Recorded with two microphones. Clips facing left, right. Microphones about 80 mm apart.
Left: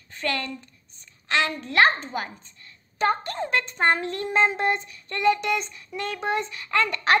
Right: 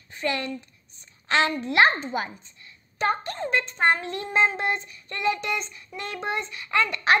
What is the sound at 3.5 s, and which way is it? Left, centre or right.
Child singing, centre.